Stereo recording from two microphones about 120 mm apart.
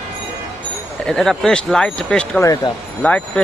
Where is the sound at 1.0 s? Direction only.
5° left (ahead or behind).